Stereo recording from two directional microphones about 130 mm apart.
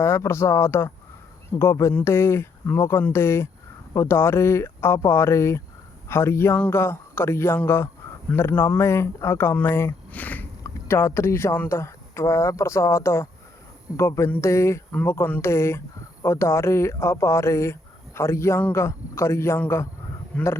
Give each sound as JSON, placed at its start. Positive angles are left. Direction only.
{"t": 0.0, "sound": "speech", "side_deg": 20}